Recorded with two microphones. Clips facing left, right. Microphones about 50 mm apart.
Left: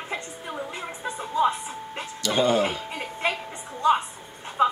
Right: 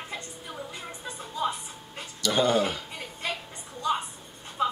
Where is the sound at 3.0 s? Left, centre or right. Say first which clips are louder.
Left 6 dB; left.